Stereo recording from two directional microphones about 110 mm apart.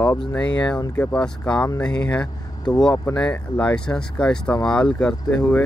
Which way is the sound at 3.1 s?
10° left (ahead or behind).